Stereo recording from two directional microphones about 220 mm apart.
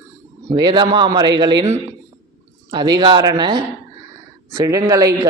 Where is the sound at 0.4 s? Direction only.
20° right (ahead or behind).